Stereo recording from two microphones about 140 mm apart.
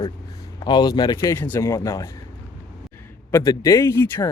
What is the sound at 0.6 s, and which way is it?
Speech, 30° left (ahead or behind).